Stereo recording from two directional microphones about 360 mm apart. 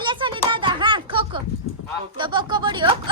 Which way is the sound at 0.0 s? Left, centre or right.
Centre.